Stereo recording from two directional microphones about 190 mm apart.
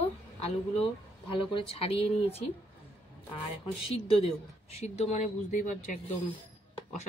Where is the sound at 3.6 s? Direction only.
30° left (ahead or behind).